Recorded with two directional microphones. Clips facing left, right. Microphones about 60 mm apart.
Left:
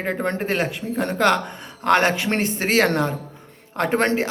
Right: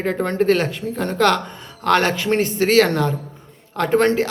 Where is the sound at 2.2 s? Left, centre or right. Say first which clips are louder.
Right 4 dB; left.